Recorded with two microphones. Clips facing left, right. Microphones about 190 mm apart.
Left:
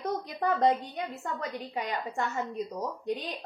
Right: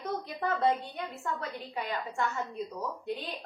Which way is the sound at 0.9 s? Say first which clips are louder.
Left 1 dB; 45° left (ahead or behind).